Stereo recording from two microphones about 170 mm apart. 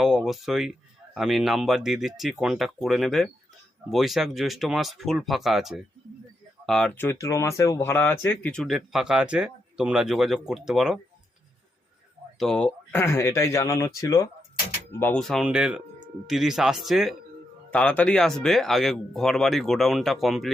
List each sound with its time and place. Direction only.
0.0 s speech: centre (ahead or behind)
12.4 s speech: 5° left (ahead or behind)
15.2 s speech: centre (ahead or behind)